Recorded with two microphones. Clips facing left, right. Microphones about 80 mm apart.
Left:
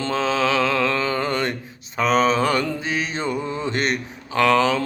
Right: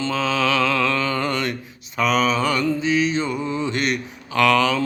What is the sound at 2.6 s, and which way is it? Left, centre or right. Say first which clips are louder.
Mantra: right 6 dB; left.